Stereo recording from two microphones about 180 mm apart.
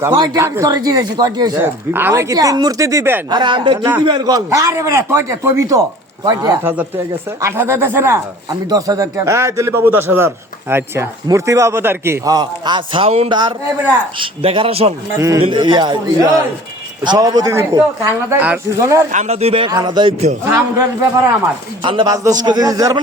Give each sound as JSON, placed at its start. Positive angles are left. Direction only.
{"t": 0.0, "sound": "speech", "side_deg": -20}
{"t": 3.2, "sound": "speech", "side_deg": -25}
{"t": 6.6, "sound": "speech", "side_deg": -10}
{"t": 15.2, "sound": "speech", "side_deg": -15}
{"t": 17.0, "sound": "speech", "side_deg": -25}
{"t": 19.1, "sound": "speech", "side_deg": -40}
{"t": 20.4, "sound": "speech", "side_deg": -15}
{"t": 21.8, "sound": "speech", "side_deg": -25}